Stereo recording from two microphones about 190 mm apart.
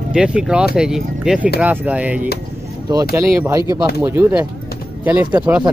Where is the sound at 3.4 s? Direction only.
20° right (ahead or behind).